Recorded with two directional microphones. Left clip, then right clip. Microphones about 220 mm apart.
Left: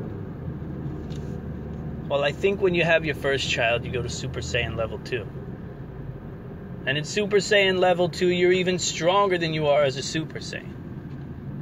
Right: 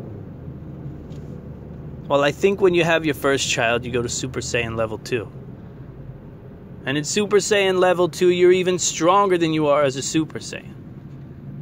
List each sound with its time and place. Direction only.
2.0 s speech: 45° right (ahead or behind)
6.8 s speech: 45° right (ahead or behind)